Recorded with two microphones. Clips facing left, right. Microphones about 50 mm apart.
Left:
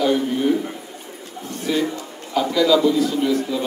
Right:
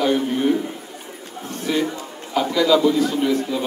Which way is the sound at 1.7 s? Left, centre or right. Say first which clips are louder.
Even; centre.